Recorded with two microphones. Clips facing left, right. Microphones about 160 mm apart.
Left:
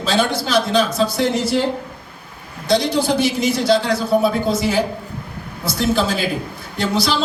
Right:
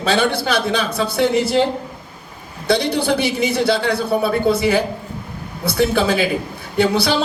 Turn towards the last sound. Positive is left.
turn(degrees=-60)  # may be behind; listen again after turning